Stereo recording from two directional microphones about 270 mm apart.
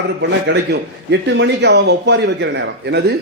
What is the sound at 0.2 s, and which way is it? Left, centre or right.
A man's voice, right.